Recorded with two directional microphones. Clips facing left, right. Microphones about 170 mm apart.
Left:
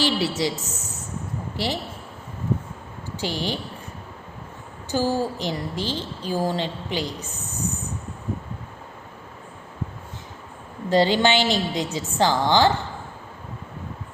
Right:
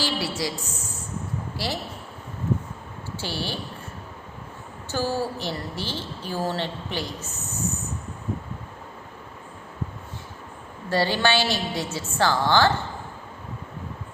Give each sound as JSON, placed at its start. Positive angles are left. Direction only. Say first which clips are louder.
{"t": 0.0, "sound": "a woman's voice", "louder": "left 5 dB", "side_deg": 20}
{"t": 3.2, "sound": "a woman's voice", "louder": "left 4 dB", "side_deg": 15}
{"t": 4.9, "sound": "a woman's voice", "louder": "left 3 dB", "side_deg": 15}
{"t": 10.8, "sound": "a woman's voice", "louder": "left 4 dB", "side_deg": 20}